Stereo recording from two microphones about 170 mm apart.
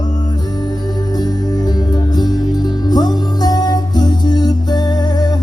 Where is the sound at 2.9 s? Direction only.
25° left (ahead or behind).